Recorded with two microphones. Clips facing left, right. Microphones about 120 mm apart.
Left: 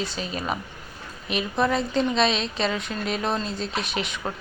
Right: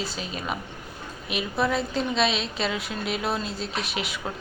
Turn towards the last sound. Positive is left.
turn(degrees=0)  # may be behind; listen again after turning